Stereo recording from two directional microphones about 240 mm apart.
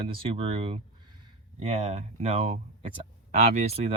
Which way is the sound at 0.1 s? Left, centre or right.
Right.